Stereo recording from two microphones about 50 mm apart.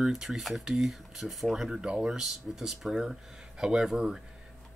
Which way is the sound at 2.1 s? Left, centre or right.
Centre.